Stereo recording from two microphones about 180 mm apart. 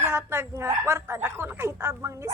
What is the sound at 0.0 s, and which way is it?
A woman's voice, 15° right (ahead or behind).